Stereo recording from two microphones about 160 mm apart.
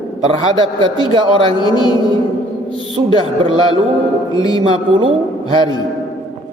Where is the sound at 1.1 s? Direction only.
30° right (ahead or behind).